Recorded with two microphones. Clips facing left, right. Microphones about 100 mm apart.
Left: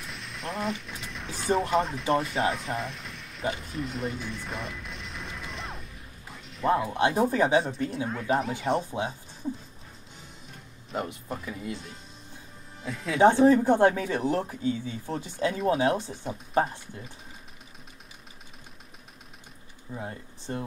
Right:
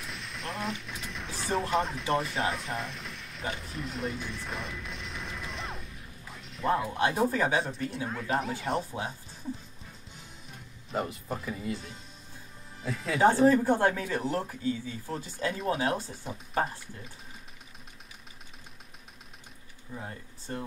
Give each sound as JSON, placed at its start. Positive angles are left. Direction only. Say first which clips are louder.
{"t": 0.0, "sound": "speech", "louder": "left 2 dB", "side_deg": 0}
{"t": 3.5, "sound": "music", "louder": "left 3 dB", "side_deg": 0}
{"t": 6.9, "sound": "speech", "louder": "left 3 dB", "side_deg": 20}
{"t": 7.5, "sound": "speech", "louder": "left 5 dB", "side_deg": 0}
{"t": 10.9, "sound": "speech", "louder": "even", "side_deg": 0}
{"t": 12.8, "sound": "speech", "louder": "left 1 dB", "side_deg": 0}
{"t": 13.2, "sound": "speech", "louder": "left 3 dB", "side_deg": 20}
{"t": 15.3, "sound": "speech", "louder": "left 5 dB", "side_deg": 0}
{"t": 19.9, "sound": "speech", "louder": "left 4 dB", "side_deg": 20}